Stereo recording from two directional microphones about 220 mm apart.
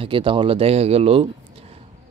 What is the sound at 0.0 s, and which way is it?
Speech, 25° right (ahead or behind).